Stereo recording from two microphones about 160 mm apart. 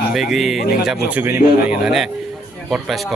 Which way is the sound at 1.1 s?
10° right (ahead or behind).